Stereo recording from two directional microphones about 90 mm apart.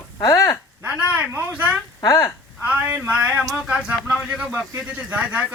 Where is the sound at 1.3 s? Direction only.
20° right (ahead or behind).